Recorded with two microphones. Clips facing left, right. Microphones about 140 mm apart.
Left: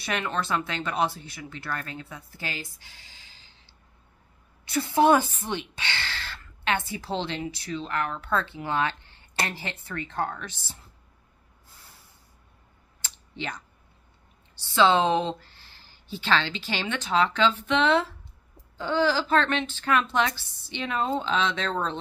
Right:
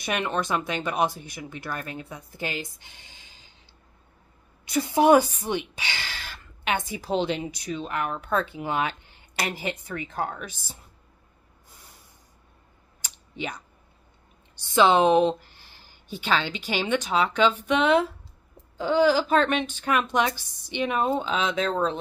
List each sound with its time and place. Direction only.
0.0 s speech: 15° right (ahead or behind)
4.6 s a woman's voice: 15° right (ahead or behind)
13.0 s a sound: 10° right (ahead or behind)
14.6 s a woman's voice: 15° right (ahead or behind)